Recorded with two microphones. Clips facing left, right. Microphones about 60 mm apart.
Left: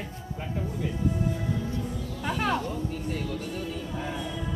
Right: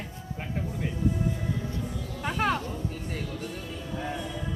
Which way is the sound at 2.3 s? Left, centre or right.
Right.